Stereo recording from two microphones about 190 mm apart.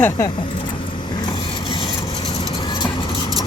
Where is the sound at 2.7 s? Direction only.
25° left (ahead or behind).